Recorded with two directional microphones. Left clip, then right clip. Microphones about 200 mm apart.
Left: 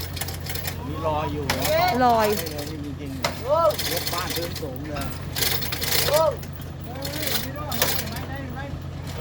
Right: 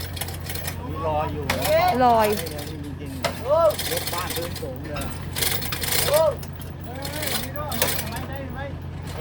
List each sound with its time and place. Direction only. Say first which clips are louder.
1.0 s speech: right 1 dB; 40° left (ahead or behind)
1.5 s speech: right 2 dB; 15° left (ahead or behind)
2.0 s speech: even; centre (ahead or behind)
2.3 s speech: even; 15° left (ahead or behind)
5.4 s vehicle: left 1 dB; 10° left (ahead or behind)